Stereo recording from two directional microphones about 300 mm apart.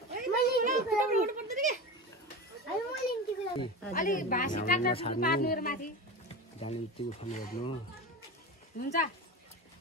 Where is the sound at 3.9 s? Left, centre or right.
Left.